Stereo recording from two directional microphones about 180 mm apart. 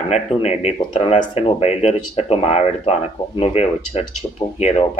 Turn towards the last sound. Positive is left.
turn(degrees=40)  # may be behind; listen again after turning